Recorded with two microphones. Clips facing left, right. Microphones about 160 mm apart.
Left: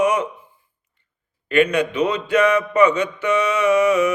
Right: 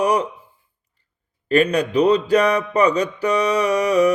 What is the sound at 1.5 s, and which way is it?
Mantra, 35° right (ahead or behind).